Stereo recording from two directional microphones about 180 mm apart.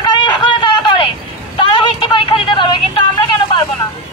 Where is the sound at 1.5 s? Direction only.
25° left (ahead or behind).